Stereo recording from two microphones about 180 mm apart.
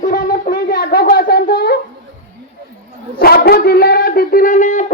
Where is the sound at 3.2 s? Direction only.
60° left (ahead or behind).